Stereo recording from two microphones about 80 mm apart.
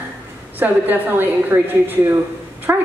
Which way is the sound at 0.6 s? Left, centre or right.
Right.